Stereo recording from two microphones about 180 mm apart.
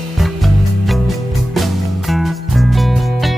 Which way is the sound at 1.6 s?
Centre (ahead or behind).